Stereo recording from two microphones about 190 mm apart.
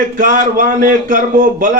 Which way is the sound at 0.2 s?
45° right (ahead or behind).